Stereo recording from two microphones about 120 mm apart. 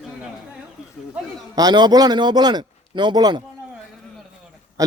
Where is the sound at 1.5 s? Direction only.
35° right (ahead or behind).